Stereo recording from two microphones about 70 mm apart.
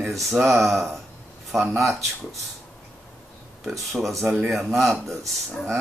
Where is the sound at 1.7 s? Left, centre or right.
Right.